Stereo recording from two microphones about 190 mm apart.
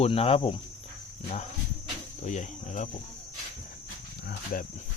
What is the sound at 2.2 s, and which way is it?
Speech, 40° left (ahead or behind).